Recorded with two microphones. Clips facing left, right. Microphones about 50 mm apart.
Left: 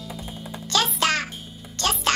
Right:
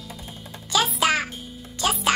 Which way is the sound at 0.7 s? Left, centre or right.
Centre.